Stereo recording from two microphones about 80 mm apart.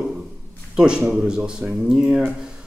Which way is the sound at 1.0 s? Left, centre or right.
Centre.